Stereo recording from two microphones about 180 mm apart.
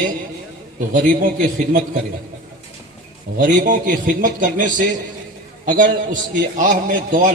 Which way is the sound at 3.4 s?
50° right (ahead or behind).